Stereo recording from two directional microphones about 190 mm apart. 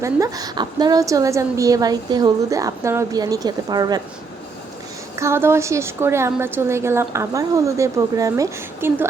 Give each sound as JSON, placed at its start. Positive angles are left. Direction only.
{"t": 0.0, "sound": "a woman's voice", "side_deg": -20}
{"t": 5.1, "sound": "a woman's voice", "side_deg": -15}